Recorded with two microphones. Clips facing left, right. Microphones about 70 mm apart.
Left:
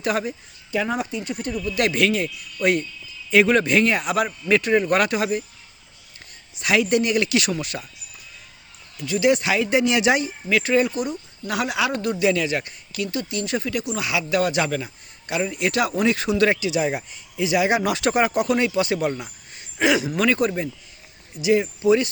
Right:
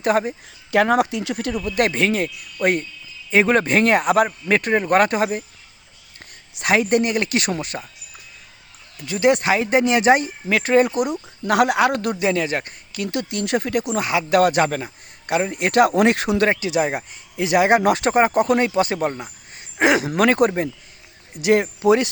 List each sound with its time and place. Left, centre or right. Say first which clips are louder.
0.0 s speech: right 5 dB; right
0.7 s speech: right 7 dB; right
1.6 s speech: right 1 dB; right
6.5 s speech: right 3 dB; right
6.7 s speech: right 1 dB; right
9.0 s speech: right 2 dB; right
12.2 s speech: left 2 dB; right
13.1 s speech: right 5 dB; right
16.5 s speech: right 2 dB; right
19.1 s a sound: even; right
19.8 s speech: right 3 dB; right